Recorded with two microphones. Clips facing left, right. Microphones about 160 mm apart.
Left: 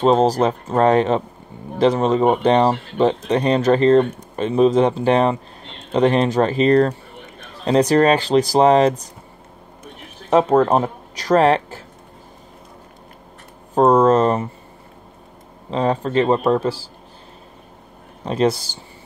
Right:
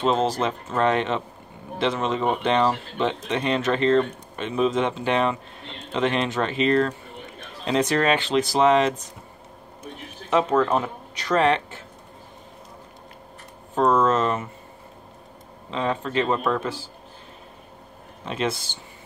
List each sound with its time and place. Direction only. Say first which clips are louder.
0.0 s speech: left 7 dB; 40° left (ahead or behind)
10.3 s speech: left 6 dB; 40° left (ahead or behind)
13.7 s speech: left 6 dB; 40° left (ahead or behind)
15.7 s speech: left 6 dB; 40° left (ahead or behind)
18.2 s speech: left 8 dB; 40° left (ahead or behind)